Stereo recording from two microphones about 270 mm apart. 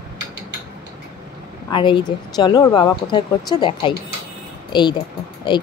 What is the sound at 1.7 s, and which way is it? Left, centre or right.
Speech, centre.